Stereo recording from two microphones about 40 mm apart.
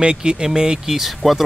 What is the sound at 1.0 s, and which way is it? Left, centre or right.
Speech, centre.